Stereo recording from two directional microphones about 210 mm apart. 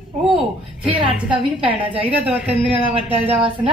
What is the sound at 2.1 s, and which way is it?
Speech, 5° right (ahead or behind).